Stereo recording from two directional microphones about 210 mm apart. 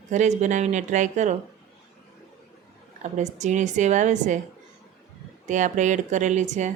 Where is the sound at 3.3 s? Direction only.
35° right (ahead or behind).